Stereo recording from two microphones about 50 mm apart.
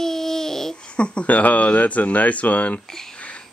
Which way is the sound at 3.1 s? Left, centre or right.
Left.